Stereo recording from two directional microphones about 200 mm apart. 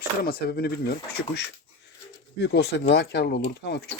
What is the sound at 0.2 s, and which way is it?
Speech, 50° left (ahead or behind).